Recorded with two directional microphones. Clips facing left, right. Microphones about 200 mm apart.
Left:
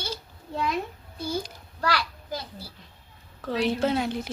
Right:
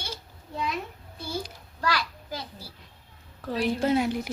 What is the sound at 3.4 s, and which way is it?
Speech, 10° right (ahead or behind).